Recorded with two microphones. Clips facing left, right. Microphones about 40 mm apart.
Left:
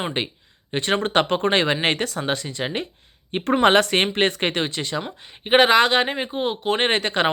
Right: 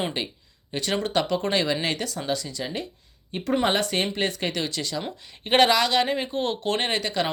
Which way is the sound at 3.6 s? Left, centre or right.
Left.